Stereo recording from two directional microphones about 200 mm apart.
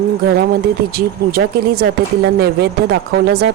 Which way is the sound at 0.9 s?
50° right (ahead or behind).